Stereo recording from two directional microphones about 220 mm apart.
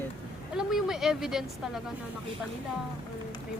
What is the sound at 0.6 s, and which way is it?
Speech, centre (ahead or behind).